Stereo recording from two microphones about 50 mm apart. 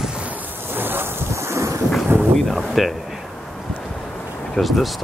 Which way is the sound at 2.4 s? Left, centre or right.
Centre.